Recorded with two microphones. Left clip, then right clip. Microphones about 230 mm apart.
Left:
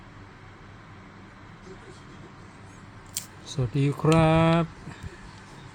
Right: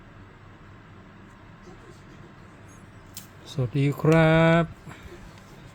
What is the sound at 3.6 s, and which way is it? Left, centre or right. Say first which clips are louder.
Speech: right 1 dB; centre.